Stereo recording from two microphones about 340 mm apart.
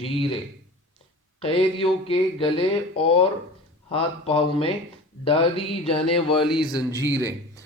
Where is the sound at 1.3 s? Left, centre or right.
Centre.